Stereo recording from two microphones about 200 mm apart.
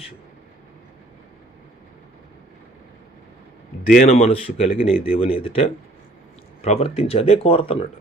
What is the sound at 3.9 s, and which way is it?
Speech, 35° left (ahead or behind).